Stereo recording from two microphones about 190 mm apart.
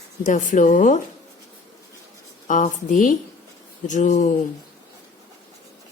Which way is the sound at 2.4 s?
40° left (ahead or behind).